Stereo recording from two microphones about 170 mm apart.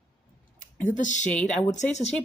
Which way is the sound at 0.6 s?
50° left (ahead or behind).